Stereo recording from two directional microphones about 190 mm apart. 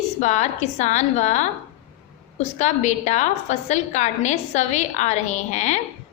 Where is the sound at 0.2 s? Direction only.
40° left (ahead or behind).